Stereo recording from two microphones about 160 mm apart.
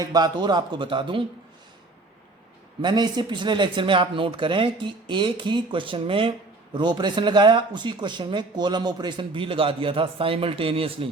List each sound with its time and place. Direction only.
0.0 s speech: 25° right (ahead or behind)
2.8 s speech: 25° right (ahead or behind)